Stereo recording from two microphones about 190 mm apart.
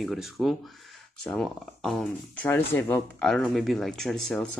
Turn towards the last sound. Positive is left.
turn(degrees=0)  # may be behind; listen again after turning